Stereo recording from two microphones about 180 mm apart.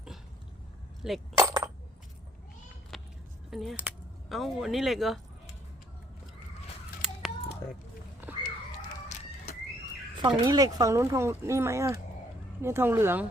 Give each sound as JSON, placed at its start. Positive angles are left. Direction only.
{"t": 1.0, "sound": "speech", "side_deg": -5}
{"t": 1.4, "sound": "coin", "side_deg": -20}
{"t": 2.9, "sound": "vehicle", "side_deg": 0}
{"t": 3.5, "sound": "speech", "side_deg": 0}
{"t": 8.2, "sound": "a sound", "side_deg": -10}
{"t": 10.2, "sound": "speech", "side_deg": -25}